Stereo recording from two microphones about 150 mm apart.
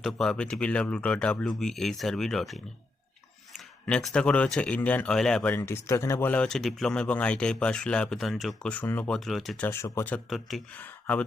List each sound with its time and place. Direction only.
0.0 s speech: 5° left (ahead or behind)
3.8 s speech: 5° left (ahead or behind)
9.6 s speech: 15° left (ahead or behind)
10.2 s speech: centre (ahead or behind)
10.8 s speech: 10° left (ahead or behind)